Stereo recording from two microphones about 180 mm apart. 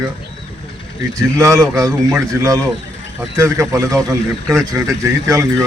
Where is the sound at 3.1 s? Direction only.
15° right (ahead or behind).